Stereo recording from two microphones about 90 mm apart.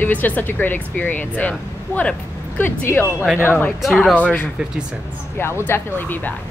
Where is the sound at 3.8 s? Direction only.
Centre (ahead or behind).